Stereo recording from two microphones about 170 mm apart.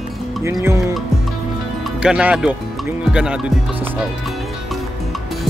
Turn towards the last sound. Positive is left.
turn(degrees=-5)  # may be behind; listen again after turning